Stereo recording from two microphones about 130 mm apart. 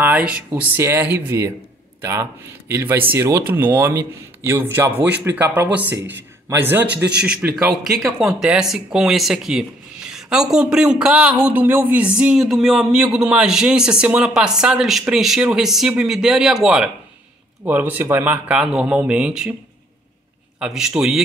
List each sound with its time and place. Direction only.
0.0 s a man's voice: 10° right (ahead or behind)
20.5 s a man's voice: 5° right (ahead or behind)